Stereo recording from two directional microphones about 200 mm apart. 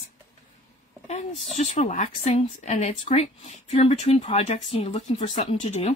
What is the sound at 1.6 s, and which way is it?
Speech, 40° left (ahead or behind).